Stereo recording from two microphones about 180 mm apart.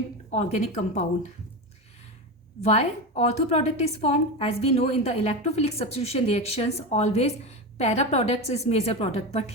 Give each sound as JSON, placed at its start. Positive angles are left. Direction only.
{"t": 0.3, "sound": "a woman's voice", "side_deg": 35}
{"t": 2.6, "sound": "a woman's voice", "side_deg": 35}